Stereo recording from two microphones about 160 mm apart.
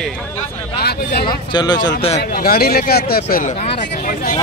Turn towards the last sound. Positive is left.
turn(degrees=55)  # may be behind; listen again after turning